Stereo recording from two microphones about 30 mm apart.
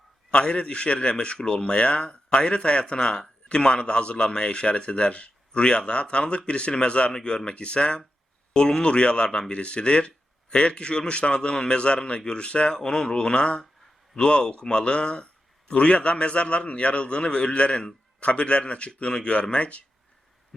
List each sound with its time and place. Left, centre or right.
0.3 s a man's voice: left
7.1 s a man's voice: left
12.7 s a man's voice: left